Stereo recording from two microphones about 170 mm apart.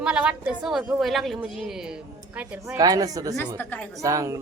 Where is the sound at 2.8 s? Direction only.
20° right (ahead or behind).